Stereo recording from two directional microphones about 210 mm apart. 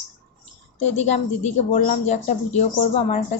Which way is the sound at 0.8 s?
30° left (ahead or behind).